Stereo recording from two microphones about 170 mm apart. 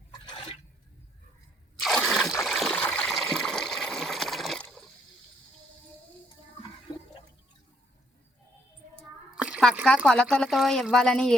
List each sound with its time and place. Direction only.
0.3 s toilet flush: 30° left (ahead or behind)
1.8 s trickle: centre (ahead or behind)
9.0 s speech: 5° right (ahead or behind)